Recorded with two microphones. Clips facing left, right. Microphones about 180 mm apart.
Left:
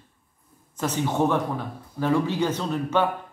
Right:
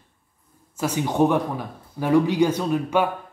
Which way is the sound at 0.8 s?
15° right (ahead or behind).